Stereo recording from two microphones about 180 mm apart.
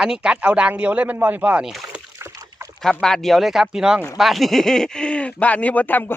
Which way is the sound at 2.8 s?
5° left (ahead or behind).